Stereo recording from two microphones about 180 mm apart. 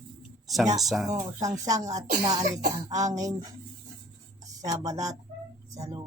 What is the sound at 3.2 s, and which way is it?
Speech, 20° right (ahead or behind).